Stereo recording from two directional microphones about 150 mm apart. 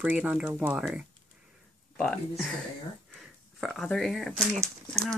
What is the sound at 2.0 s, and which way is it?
Speech, 5° left (ahead or behind).